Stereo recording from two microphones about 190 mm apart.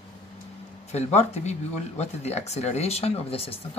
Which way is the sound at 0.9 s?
35° left (ahead or behind).